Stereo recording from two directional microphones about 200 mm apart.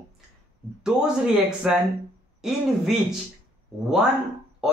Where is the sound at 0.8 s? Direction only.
5° right (ahead or behind).